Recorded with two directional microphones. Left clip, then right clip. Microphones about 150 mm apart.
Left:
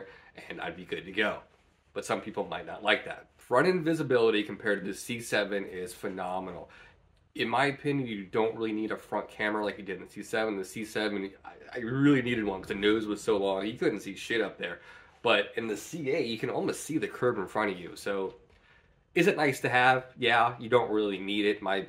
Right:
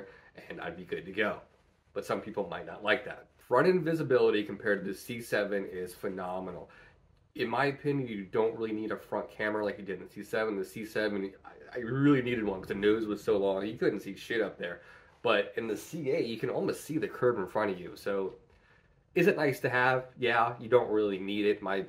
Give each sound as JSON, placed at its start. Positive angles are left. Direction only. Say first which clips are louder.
{"t": 0.4, "sound": "speech", "louder": "left 2 dB", "side_deg": 15}
{"t": 15.6, "sound": "speech", "louder": "left 1 dB", "side_deg": 0}